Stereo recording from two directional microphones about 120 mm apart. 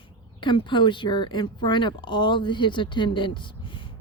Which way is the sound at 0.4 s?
40° left (ahead or behind).